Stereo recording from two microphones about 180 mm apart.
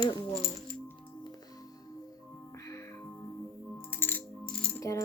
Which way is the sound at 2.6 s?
15° left (ahead or behind).